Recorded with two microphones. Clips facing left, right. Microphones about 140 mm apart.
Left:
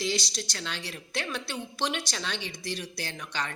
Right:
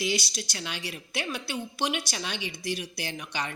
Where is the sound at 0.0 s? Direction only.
10° right (ahead or behind).